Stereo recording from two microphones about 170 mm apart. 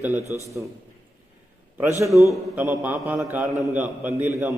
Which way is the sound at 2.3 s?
10° right (ahead or behind).